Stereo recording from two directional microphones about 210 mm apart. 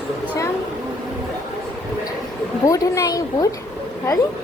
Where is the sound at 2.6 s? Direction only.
15° left (ahead or behind).